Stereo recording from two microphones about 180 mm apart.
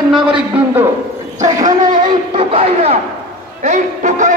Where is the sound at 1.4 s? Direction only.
20° right (ahead or behind).